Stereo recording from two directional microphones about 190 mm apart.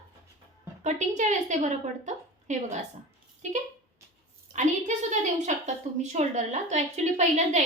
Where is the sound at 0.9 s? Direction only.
40° right (ahead or behind).